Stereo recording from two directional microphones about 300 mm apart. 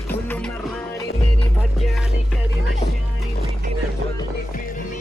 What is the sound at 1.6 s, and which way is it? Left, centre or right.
Music, centre.